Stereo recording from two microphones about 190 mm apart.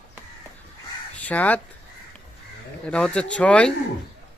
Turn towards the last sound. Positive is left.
turn(degrees=5)  # may be behind; listen again after turning